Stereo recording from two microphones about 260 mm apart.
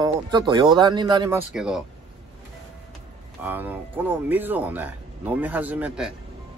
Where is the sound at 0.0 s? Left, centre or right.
Centre.